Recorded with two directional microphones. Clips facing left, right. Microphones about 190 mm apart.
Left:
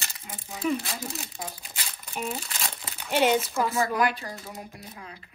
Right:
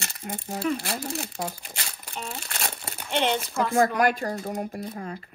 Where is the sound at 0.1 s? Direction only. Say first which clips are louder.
Right 8 dB; 55° right (ahead or behind).